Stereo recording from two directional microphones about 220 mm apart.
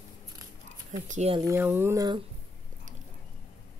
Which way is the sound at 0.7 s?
35° right (ahead or behind).